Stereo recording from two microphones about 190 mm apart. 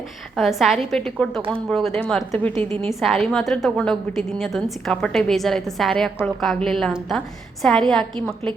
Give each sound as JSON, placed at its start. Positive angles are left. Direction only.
{"t": 0.3, "sound": "a woman's voice", "side_deg": 0}
{"t": 1.4, "sound": "speech", "side_deg": -30}
{"t": 1.7, "sound": "a woman's voice", "side_deg": 0}